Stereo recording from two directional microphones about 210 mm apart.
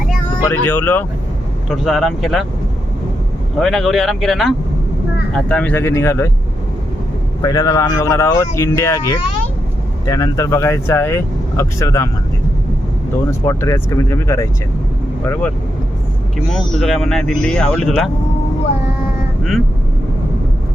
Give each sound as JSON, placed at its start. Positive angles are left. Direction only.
{"t": 0.4, "sound": "speech", "side_deg": 10}
{"t": 1.7, "sound": "speech", "side_deg": 0}
{"t": 3.6, "sound": "speech", "side_deg": 0}
{"t": 7.4, "sound": "speech", "side_deg": 15}
{"t": 13.4, "sound": "speech", "side_deg": 15}